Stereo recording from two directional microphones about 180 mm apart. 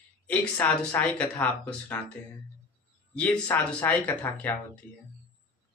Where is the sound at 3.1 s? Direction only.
10° left (ahead or behind).